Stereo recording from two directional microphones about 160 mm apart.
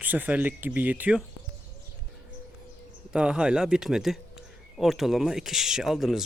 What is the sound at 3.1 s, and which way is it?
Speech, 5° right (ahead or behind).